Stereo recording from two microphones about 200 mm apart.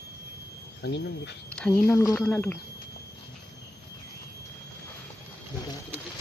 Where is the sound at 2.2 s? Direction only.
5° left (ahead or behind).